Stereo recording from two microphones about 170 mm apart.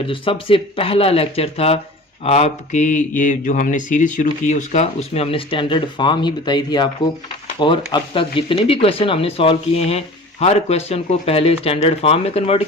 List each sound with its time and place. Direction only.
0.1 s speech: 30° left (ahead or behind)